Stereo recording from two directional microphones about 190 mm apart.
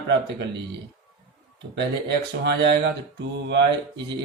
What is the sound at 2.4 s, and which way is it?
Speech, 65° right (ahead or behind).